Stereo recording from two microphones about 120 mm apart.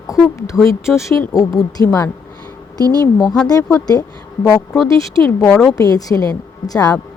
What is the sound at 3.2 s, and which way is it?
Speech, 5° left (ahead or behind).